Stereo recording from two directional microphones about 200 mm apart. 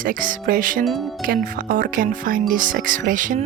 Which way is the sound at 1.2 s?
45° right (ahead or behind).